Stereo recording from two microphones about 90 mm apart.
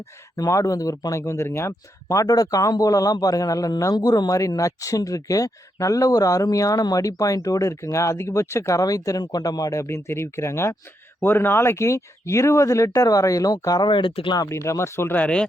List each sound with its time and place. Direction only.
0.3 s speech: 40° left (ahead or behind)
3.9 s speech: 50° left (ahead or behind)
13.9 s speech: 65° left (ahead or behind)
14.5 s speech: 30° left (ahead or behind); by 15.4 s 15° left (ahead or behind)